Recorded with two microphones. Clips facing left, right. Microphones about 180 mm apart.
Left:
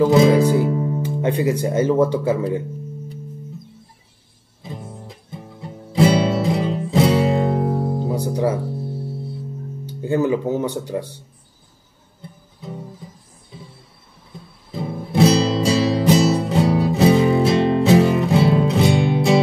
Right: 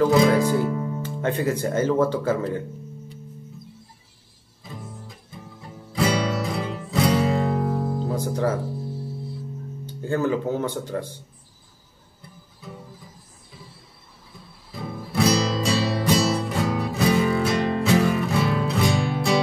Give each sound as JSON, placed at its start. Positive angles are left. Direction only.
{"t": 0.0, "sound": "music", "side_deg": 25}
{"t": 0.3, "sound": "music", "side_deg": 15}
{"t": 1.0, "sound": "speech", "side_deg": 15}
{"t": 5.6, "sound": "music", "side_deg": 30}
{"t": 8.1, "sound": "guitar", "side_deg": 15}
{"t": 9.8, "sound": "speech", "side_deg": 15}
{"t": 14.8, "sound": "music", "side_deg": 25}